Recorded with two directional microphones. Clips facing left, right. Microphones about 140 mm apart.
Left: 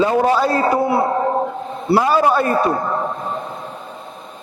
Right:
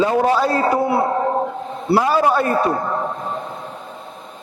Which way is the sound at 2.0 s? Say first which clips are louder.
Left 1 dB; 20° left (ahead or behind).